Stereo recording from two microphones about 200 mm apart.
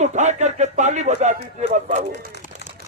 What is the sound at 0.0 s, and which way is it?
Speech, 35° right (ahead or behind).